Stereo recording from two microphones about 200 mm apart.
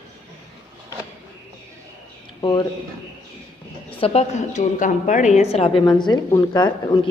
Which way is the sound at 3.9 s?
30° left (ahead or behind).